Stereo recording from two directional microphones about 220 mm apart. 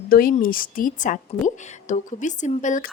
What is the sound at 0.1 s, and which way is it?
Speech, 40° left (ahead or behind).